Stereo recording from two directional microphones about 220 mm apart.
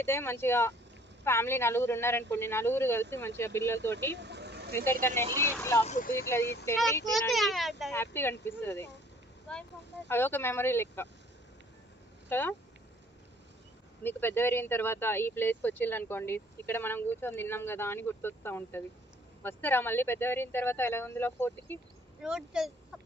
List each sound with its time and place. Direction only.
0.0 s speech: 10° left (ahead or behind)
4.2 s vehicle: 50° right (ahead or behind)
4.9 s speech: 10° left (ahead or behind)
5.8 s speech: 35° left (ahead or behind)
7.1 s a child's voice: centre (ahead or behind)
7.9 s speech: 10° left (ahead or behind)
10.1 s speech: 10° left (ahead or behind)
12.3 s speech: 10° left (ahead or behind)
14.0 s speech: 10° left (ahead or behind)
22.2 s speech: 5° right (ahead or behind)